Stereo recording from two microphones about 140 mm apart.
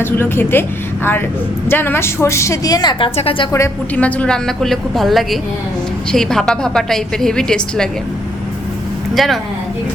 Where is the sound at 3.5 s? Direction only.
20° left (ahead or behind).